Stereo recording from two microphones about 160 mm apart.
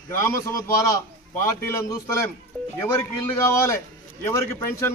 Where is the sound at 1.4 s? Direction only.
15° left (ahead or behind).